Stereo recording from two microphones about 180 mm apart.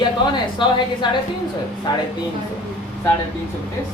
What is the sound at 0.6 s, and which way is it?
Speech, 25° left (ahead or behind).